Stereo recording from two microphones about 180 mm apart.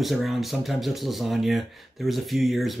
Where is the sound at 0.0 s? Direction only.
Centre (ahead or behind).